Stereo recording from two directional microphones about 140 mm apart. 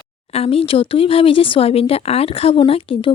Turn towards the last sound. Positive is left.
turn(degrees=40)  # may be behind; listen again after turning